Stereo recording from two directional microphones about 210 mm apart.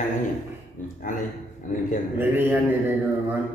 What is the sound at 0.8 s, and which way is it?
Speech, 35° left (ahead or behind).